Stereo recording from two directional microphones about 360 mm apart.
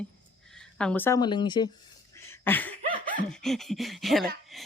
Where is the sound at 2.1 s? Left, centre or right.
Centre.